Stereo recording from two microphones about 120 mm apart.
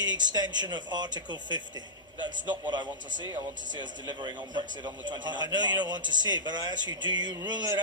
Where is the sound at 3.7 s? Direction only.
40° right (ahead or behind).